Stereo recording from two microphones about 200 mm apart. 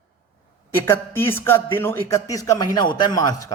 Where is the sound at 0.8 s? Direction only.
10° left (ahead or behind).